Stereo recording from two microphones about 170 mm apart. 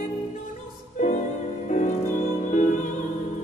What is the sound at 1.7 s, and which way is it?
Music, 45° left (ahead or behind).